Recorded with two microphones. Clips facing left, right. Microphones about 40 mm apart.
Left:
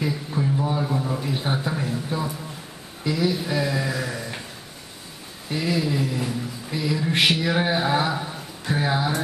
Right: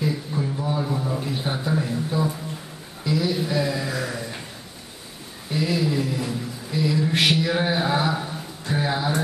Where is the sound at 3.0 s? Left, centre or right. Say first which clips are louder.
Even; centre.